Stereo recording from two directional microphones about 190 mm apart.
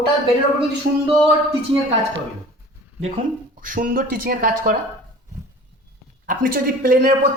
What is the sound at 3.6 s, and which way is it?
Speech, 45° right (ahead or behind).